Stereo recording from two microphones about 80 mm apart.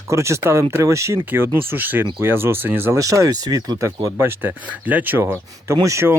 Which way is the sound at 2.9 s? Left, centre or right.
Right.